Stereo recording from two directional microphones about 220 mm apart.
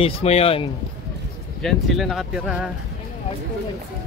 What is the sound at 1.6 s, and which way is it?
Speech, centre (ahead or behind).